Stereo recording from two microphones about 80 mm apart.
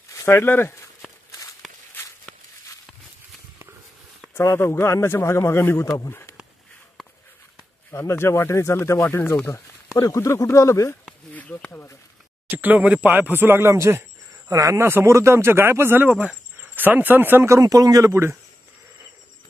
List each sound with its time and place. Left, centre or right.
0.1 s a sound: left
0.4 s speech: left
1.6 s walk: centre
4.3 s speech: left
5.9 s speech: left
7.9 s speech: left
11.3 s speech: centre
12.4 s speech: right
17.6 s a man's voice: right
18.1 s speech: right